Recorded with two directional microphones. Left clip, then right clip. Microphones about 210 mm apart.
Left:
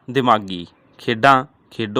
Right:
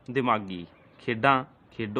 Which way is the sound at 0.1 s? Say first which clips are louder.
Left 10 dB; 40° left (ahead or behind).